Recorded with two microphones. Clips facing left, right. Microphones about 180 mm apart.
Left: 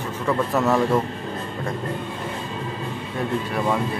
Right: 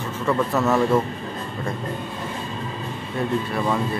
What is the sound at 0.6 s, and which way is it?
Speech, 15° left (ahead or behind).